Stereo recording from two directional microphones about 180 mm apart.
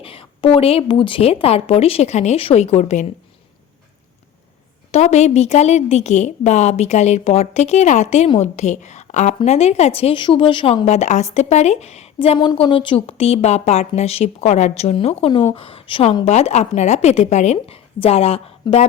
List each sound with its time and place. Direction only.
0.0 s a woman's voice: 30° left (ahead or behind)
4.9 s a woman's voice: 40° left (ahead or behind)